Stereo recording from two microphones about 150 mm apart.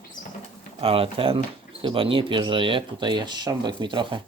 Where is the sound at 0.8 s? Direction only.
40° right (ahead or behind).